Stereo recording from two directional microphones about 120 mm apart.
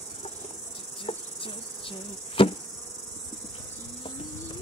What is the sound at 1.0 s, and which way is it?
Insect, 45° left (ahead or behind).